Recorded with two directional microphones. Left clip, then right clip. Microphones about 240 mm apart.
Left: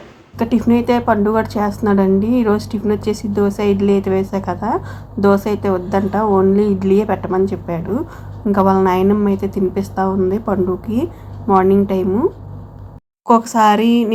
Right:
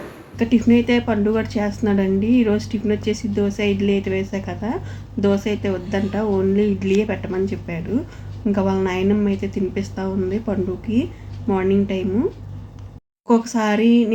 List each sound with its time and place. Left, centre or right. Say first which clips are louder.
0.3 s a woman's voice: left 1 dB; centre
13.2 s a woman's voice: left 8 dB; centre